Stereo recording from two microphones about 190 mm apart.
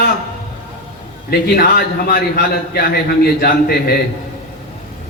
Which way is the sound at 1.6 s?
55° left (ahead or behind).